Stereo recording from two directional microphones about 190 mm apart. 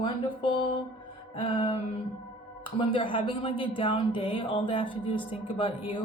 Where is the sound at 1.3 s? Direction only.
25° left (ahead or behind).